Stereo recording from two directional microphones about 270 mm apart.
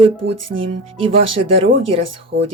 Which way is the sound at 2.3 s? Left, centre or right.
Right.